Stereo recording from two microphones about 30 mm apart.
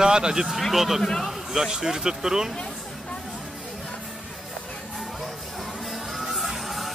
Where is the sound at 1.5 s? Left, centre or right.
Centre.